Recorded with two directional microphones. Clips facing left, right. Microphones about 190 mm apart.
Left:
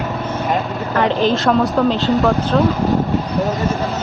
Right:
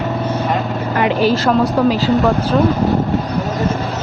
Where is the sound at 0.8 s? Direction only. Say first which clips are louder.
Right 1 dB; 10° right (ahead or behind).